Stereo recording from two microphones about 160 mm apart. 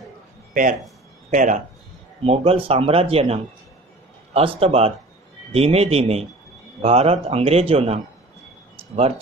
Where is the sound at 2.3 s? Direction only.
35° right (ahead or behind).